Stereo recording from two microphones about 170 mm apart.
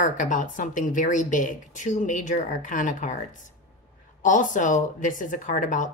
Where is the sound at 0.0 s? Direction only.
50° left (ahead or behind).